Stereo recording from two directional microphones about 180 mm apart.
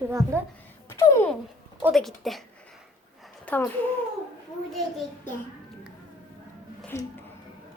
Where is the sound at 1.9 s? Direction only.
Centre (ahead or behind).